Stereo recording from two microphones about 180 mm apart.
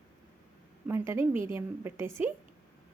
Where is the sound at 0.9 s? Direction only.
15° right (ahead or behind).